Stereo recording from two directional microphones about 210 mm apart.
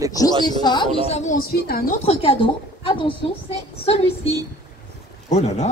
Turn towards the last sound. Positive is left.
turn(degrees=30)  # may be behind; listen again after turning